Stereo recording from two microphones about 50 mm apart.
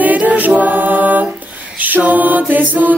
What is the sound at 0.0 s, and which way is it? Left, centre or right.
Music, right.